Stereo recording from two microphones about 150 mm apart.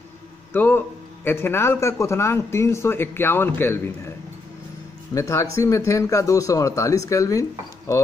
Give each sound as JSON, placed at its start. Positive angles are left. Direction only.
{"t": 0.5, "sound": "a man's voice", "side_deg": 15}
{"t": 5.1, "sound": "speech", "side_deg": 20}